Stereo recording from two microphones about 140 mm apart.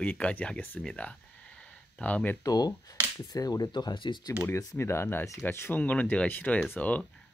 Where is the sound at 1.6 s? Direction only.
10° left (ahead or behind).